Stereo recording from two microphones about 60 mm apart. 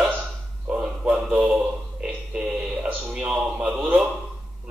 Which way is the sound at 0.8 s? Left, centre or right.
Centre.